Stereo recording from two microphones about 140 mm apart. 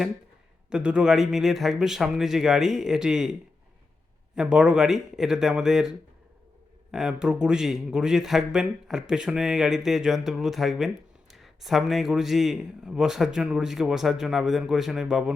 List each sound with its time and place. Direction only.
0.7 s a man's voice: 5° right (ahead or behind)
4.4 s a man's voice: 5° right (ahead or behind)
6.9 s a man's voice: 5° right (ahead or behind)